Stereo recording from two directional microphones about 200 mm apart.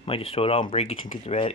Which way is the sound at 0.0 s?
30° left (ahead or behind).